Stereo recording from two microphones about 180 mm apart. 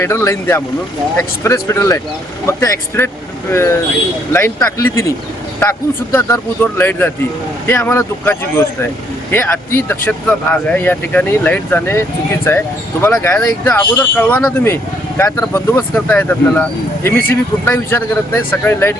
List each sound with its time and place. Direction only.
0.0 s speech: 15° left (ahead or behind)
4.3 s speech: 15° left (ahead or behind)